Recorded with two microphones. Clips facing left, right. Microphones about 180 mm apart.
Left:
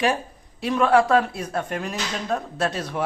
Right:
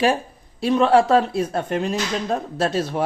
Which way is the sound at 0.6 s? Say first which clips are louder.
Right 3 dB; 25° right (ahead or behind).